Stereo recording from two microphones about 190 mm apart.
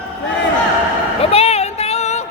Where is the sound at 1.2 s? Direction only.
30° left (ahead or behind).